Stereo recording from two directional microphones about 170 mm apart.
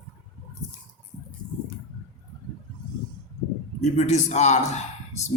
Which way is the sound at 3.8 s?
45° left (ahead or behind).